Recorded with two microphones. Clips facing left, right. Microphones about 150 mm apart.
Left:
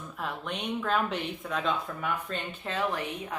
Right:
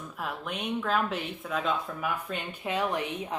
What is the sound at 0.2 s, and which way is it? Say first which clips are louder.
Speech: even; 5° right (ahead or behind).